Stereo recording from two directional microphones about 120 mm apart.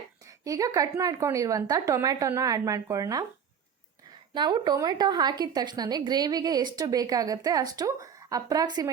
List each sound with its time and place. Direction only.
0.3 s a woman's voice: 30° right (ahead or behind)
4.4 s a woman's voice: 40° right (ahead or behind)